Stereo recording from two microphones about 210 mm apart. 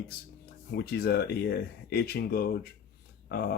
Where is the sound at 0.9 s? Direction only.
45° left (ahead or behind).